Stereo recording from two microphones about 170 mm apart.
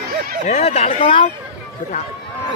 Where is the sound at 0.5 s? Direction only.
35° left (ahead or behind).